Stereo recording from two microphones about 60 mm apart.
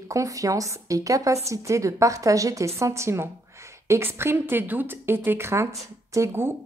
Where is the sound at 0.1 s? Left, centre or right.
Right.